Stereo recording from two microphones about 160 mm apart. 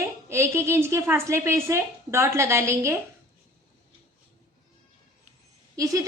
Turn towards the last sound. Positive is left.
turn(degrees=-20)  # may be behind; listen again after turning